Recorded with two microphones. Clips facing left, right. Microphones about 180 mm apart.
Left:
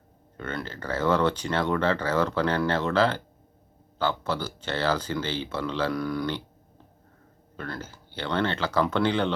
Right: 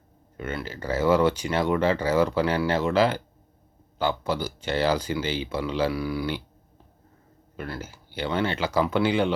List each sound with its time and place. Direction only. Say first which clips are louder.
0.3 s speech: right 1 dB; 10° right (ahead or behind)
7.5 s speech: right 1 dB; 10° right (ahead or behind)